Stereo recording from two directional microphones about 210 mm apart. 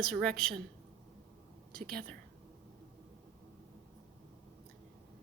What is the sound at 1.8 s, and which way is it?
Speech, 45° right (ahead or behind).